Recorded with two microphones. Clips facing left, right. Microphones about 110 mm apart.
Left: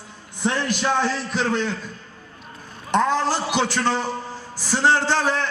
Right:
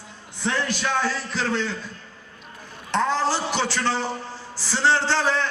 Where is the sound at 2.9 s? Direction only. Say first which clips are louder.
Left 2 dB; 15° left (ahead or behind).